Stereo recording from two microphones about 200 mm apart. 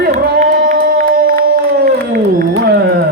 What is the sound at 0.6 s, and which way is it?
Crowd, 50° right (ahead or behind).